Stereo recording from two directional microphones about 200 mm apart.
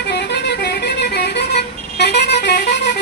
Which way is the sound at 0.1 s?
60° left (ahead or behind).